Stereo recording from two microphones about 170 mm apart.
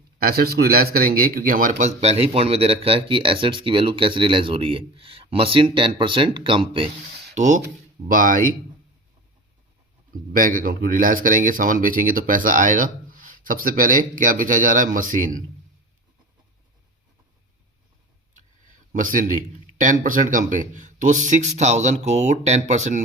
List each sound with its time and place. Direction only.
0.2 s a man's voice: 65° right (ahead or behind)
2.0 s speech: 35° right (ahead or behind)
7.3 s speech: 45° right (ahead or behind)
10.3 s speech: 55° right (ahead or behind)
18.9 s speech: 50° right (ahead or behind)